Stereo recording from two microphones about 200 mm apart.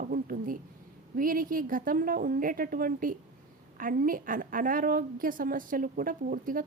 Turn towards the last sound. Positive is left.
turn(degrees=-45)  # may be behind; listen again after turning